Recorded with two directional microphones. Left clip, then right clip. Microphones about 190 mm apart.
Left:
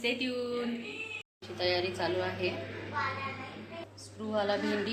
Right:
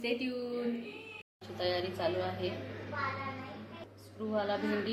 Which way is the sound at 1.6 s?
Centre (ahead or behind).